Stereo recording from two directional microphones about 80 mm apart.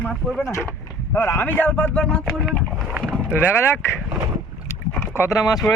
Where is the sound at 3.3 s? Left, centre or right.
Left.